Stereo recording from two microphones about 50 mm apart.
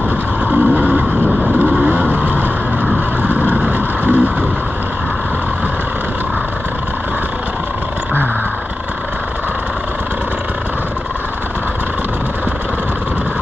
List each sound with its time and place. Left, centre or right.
0.5 s vehicle: right